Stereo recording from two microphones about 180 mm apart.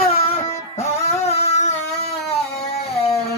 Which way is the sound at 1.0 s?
35° left (ahead or behind).